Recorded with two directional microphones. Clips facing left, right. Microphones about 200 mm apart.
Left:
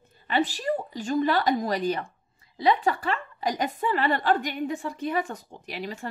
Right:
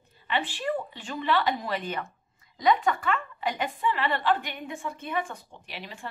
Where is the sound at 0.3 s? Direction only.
40° left (ahead or behind).